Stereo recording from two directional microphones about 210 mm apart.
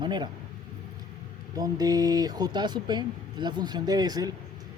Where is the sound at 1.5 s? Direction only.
15° right (ahead or behind).